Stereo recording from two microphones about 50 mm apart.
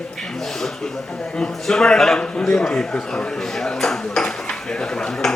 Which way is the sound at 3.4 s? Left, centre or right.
Centre.